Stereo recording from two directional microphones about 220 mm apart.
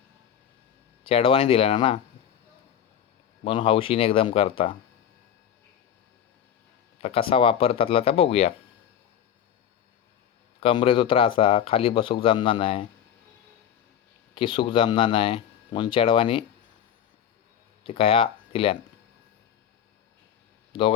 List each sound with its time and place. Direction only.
1.0 s speech: 25° left (ahead or behind)
3.4 s speech: 25° left (ahead or behind)
7.0 s speech: 25° left (ahead or behind)
10.6 s speech: 25° left (ahead or behind)
14.3 s speech: 20° left (ahead or behind)
17.8 s speech: 25° left (ahead or behind)